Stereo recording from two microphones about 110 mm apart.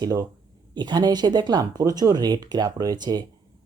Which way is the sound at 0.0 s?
35° right (ahead or behind).